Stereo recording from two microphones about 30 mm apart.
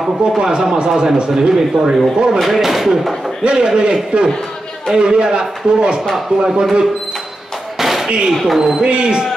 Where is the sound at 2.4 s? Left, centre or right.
Centre.